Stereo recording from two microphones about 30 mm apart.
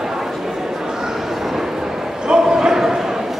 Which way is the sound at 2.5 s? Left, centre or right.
Centre.